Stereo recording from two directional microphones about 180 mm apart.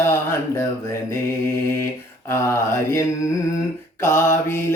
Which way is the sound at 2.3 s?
15° left (ahead or behind).